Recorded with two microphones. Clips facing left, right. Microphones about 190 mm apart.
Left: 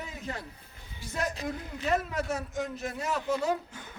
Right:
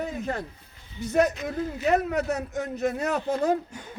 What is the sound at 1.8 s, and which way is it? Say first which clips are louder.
A man's voice: right 5 dB; 65° right (ahead or behind).